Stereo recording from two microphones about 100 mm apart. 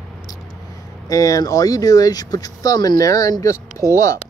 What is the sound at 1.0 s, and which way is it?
Speech, 35° left (ahead or behind).